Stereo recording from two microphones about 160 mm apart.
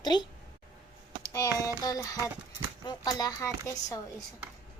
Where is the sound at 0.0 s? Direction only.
25° left (ahead or behind).